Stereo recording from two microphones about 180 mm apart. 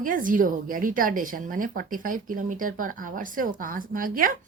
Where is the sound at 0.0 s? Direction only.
50° right (ahead or behind).